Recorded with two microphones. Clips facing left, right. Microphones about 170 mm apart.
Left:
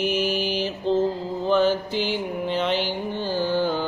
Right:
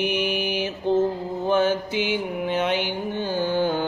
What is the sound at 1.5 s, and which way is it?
Mantra, 55° right (ahead or behind).